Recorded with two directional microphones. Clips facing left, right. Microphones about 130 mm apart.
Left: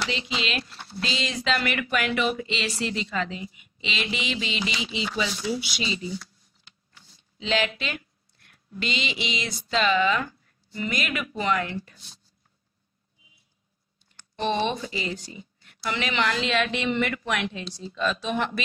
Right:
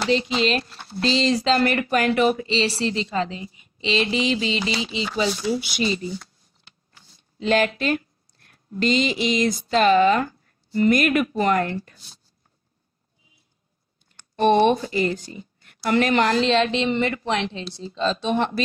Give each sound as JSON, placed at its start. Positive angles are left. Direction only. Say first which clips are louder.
{"t": 0.0, "sound": "speech", "louder": "right 9 dB", "side_deg": -45}
{"t": 14.3, "sound": "a woman's voice", "louder": "right 9 dB", "side_deg": -55}
{"t": 16.5, "sound": "a woman's voice", "louder": "right 4 dB", "side_deg": -30}